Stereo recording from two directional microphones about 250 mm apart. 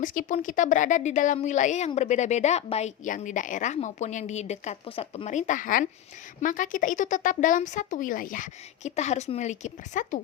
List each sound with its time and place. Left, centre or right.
0.0 s a woman's voice: left